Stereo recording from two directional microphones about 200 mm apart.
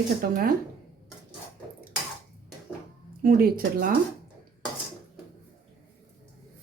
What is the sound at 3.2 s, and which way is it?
Speech, 50° right (ahead or behind).